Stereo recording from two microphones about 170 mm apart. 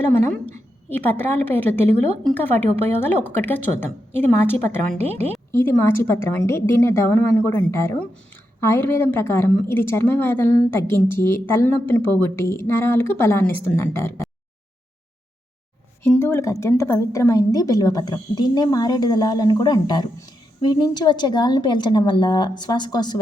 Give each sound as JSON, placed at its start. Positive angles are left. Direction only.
{"t": 0.9, "sound": "a woman's voice", "side_deg": 10}
{"t": 1.8, "sound": "a woman's voice", "side_deg": -40}
{"t": 2.2, "sound": "a woman's voice", "side_deg": 10}
{"t": 5.0, "sound": "a woman's voice", "side_deg": -35}
{"t": 5.5, "sound": "a woman's voice", "side_deg": 15}
{"t": 16.0, "sound": "a woman's voice", "side_deg": 15}